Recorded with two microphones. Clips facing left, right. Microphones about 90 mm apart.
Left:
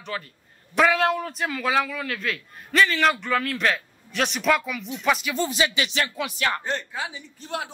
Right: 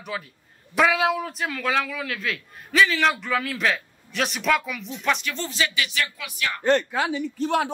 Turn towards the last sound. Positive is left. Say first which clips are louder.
# right 9 dB
turn(degrees=-75)  # may be behind; listen again after turning